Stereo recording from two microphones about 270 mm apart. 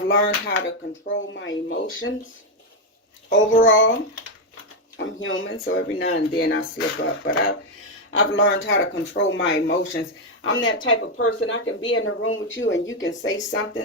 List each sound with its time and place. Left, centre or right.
0.1 s speech: left
3.7 s speech: left
4.9 s speech: left